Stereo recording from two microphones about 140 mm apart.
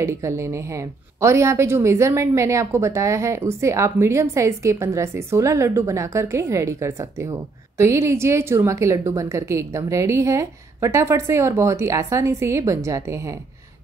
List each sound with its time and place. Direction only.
0.0 s a woman's voice: 20° right (ahead or behind)